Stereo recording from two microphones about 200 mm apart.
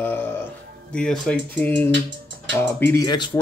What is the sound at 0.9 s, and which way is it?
Speech, 5° left (ahead or behind).